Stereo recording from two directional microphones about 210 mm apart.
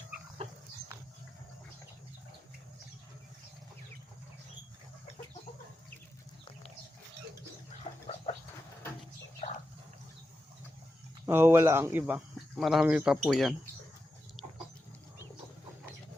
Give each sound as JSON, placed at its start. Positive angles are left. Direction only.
{"t": 0.4, "sound": "livestock", "side_deg": -30}
{"t": 8.0, "sound": "a sound", "side_deg": 25}
{"t": 11.3, "sound": "speech", "side_deg": -10}